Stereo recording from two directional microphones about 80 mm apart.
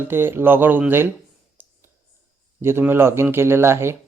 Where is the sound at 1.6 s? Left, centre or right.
Right.